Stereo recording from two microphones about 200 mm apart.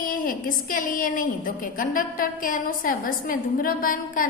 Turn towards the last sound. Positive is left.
turn(degrees=45)  # may be behind; listen again after turning